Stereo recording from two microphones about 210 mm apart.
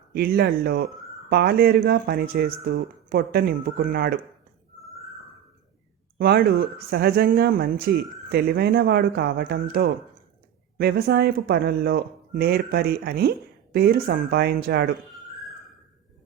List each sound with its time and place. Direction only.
0.1 s speech: 50° right (ahead or behind)
6.1 s speech: 45° right (ahead or behind)